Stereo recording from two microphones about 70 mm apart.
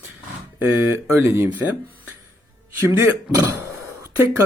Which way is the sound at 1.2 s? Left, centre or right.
Right.